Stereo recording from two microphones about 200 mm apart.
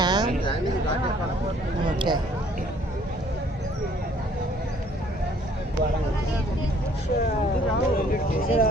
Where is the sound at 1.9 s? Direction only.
20° right (ahead or behind).